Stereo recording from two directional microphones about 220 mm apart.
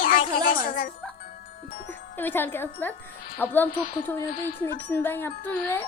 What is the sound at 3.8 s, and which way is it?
Speech, 40° left (ahead or behind).